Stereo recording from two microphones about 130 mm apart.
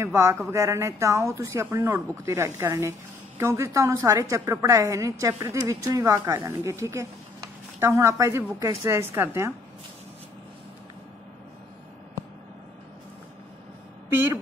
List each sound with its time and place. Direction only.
0.0 s a woman's voice: 20° right (ahead or behind)